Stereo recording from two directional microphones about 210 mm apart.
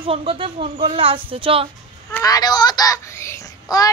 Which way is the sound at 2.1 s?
15° left (ahead or behind).